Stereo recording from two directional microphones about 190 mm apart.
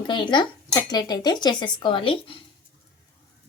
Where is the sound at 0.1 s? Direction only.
25° left (ahead or behind).